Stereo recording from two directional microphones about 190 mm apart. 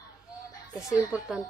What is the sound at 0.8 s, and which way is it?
Speech, 20° left (ahead or behind).